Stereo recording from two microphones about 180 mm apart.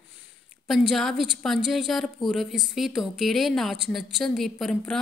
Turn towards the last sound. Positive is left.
turn(degrees=0)  # may be behind; listen again after turning